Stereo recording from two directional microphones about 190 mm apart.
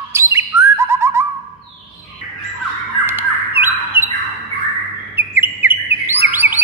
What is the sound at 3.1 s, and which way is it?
Squawk, 10° right (ahead or behind).